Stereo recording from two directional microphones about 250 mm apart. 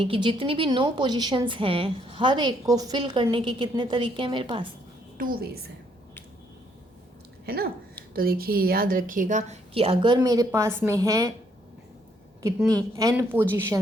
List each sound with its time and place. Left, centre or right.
0.0 s a woman's voice: right
5.1 s a woman's voice: right
7.4 s a woman's voice: right; by 11.3 s centre
12.4 s speech: centre